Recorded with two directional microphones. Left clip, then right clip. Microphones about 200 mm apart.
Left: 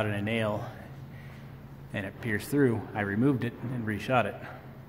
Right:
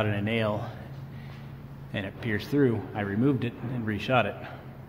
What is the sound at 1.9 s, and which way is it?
Speech, 5° left (ahead or behind).